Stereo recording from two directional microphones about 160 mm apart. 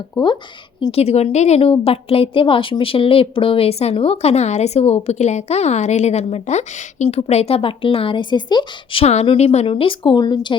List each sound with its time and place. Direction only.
0.2 s a woman's voice: 30° left (ahead or behind)
0.9 s a woman's voice: 40° left (ahead or behind)